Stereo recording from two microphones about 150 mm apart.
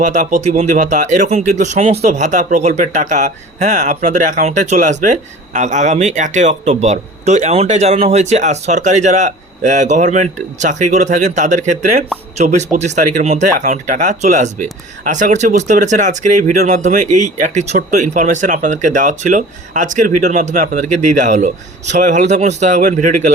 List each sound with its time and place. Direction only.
0.0 s speech: 55° right (ahead or behind)